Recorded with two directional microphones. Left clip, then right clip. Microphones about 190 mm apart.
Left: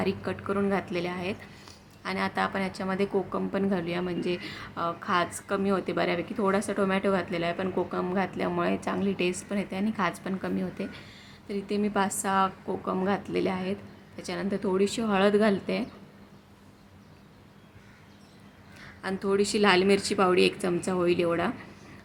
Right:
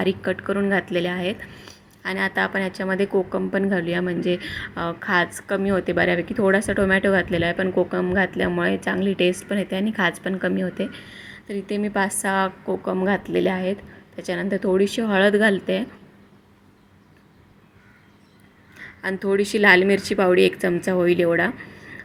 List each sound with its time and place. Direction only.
0.0 s a woman's voice: 20° right (ahead or behind)
18.8 s a woman's voice: 15° right (ahead or behind)